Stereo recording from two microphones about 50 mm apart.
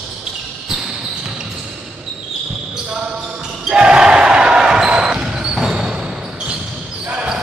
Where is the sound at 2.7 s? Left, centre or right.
Centre.